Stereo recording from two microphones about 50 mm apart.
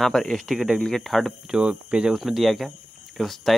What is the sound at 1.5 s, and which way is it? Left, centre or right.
Speech, right.